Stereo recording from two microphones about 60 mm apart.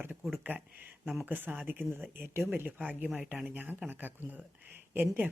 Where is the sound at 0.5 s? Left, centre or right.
Right.